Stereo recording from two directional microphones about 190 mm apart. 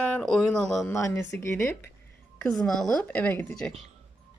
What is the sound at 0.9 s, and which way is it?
A woman's voice, 15° left (ahead or behind).